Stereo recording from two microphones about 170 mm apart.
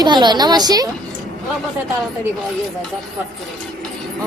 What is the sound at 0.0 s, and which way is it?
Speech, 25° right (ahead or behind).